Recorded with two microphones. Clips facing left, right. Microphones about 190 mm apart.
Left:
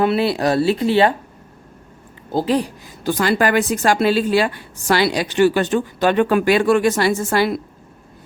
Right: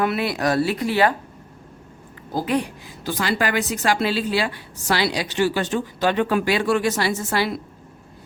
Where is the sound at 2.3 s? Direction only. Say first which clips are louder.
Left 4 dB; 30° left (ahead or behind); by 7.5 s 50° left (ahead or behind).